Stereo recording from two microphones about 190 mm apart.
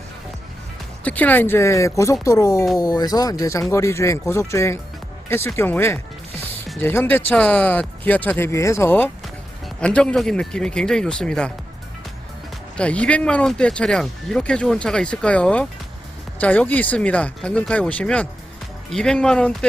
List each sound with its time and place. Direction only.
1.0 s speech: 10° left (ahead or behind)
12.7 s speech: 5° left (ahead or behind)